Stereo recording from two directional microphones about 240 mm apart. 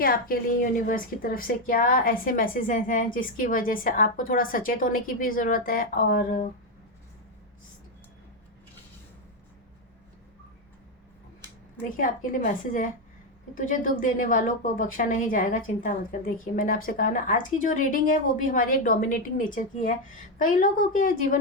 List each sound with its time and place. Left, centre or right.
0.0 s a woman's voice: left
11.8 s a woman's voice: left